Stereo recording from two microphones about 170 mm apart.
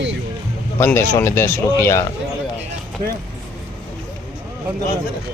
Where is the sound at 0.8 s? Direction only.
15° left (ahead or behind).